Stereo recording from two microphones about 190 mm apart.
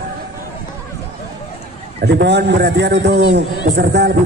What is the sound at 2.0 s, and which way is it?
A man's voice, 60° right (ahead or behind).